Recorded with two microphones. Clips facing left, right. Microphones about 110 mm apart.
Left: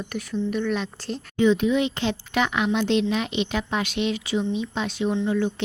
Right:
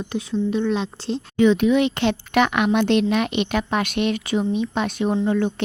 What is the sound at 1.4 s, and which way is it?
Speech, 70° right (ahead or behind).